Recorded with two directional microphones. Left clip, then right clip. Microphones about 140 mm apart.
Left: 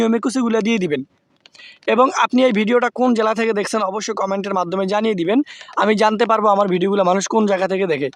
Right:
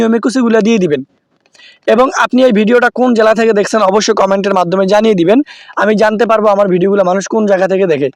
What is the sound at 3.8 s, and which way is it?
Speech, 50° right (ahead or behind).